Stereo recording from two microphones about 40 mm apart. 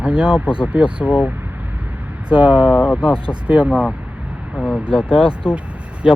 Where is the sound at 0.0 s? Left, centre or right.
Right.